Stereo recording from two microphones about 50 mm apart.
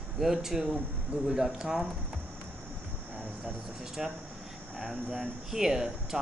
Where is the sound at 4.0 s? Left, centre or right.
Centre.